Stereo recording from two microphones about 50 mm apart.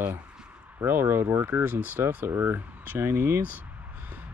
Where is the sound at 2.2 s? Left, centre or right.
Right.